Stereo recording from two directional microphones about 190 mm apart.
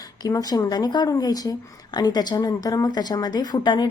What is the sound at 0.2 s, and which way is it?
A woman's voice, 20° left (ahead or behind).